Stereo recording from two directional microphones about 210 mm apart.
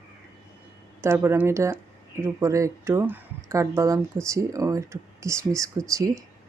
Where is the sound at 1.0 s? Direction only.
10° right (ahead or behind).